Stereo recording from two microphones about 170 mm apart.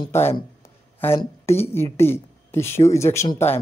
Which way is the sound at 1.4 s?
15° left (ahead or behind).